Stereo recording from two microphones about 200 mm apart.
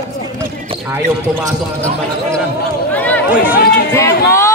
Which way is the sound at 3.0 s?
10° left (ahead or behind).